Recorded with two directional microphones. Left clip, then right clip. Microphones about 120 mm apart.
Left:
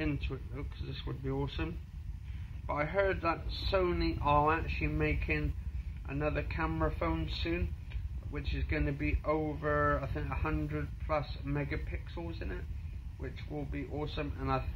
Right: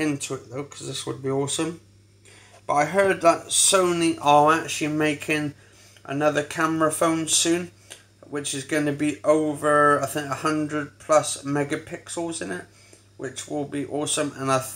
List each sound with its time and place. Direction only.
0.0 s speech: 25° right (ahead or behind)